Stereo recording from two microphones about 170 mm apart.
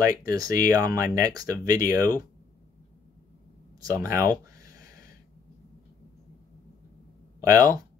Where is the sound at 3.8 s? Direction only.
20° right (ahead or behind).